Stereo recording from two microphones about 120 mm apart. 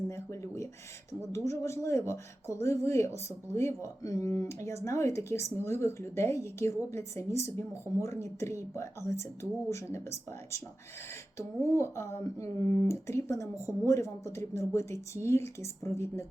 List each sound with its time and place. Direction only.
0.1 s speech: 25° left (ahead or behind)